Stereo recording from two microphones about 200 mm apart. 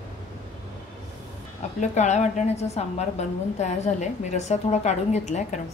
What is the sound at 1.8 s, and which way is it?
A woman's voice, 35° left (ahead or behind).